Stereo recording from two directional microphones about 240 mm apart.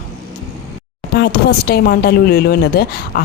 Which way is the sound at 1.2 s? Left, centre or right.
Left.